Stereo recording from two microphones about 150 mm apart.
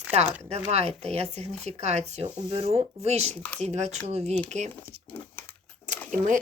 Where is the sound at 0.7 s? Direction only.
45° right (ahead or behind).